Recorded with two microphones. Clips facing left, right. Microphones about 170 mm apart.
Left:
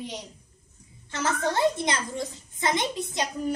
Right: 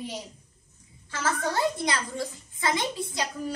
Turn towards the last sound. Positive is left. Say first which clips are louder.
# left 3 dB
turn(degrees=20)  # may be behind; listen again after turning